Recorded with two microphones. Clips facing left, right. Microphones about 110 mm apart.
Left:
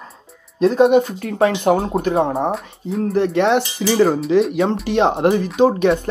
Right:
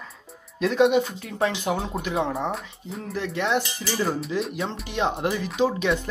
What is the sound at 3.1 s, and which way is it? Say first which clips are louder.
Speech: left 10 dB; 60° left (ahead or behind).